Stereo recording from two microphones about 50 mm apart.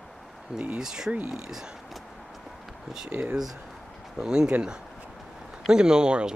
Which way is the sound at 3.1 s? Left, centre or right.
Centre.